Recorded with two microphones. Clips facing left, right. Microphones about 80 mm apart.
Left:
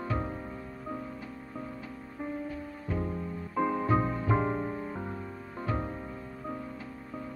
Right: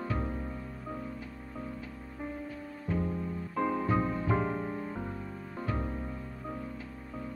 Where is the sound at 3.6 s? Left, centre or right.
Centre.